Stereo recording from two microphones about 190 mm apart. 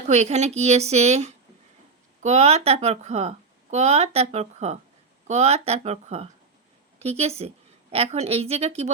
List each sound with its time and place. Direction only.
0.1 s a woman's voice: 35° right (ahead or behind)